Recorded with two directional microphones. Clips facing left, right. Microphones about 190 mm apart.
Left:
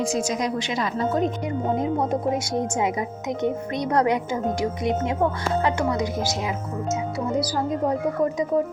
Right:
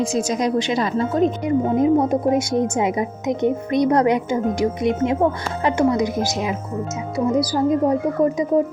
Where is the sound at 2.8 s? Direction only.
20° right (ahead or behind).